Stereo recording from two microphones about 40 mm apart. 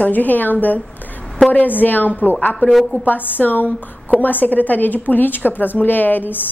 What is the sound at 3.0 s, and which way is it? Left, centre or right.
A woman's voice, left.